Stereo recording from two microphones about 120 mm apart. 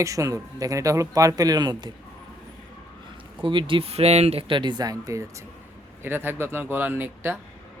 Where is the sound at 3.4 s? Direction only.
45° right (ahead or behind).